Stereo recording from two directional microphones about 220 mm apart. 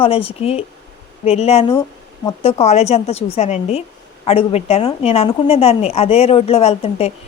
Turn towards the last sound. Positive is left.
turn(degrees=30)  # may be behind; listen again after turning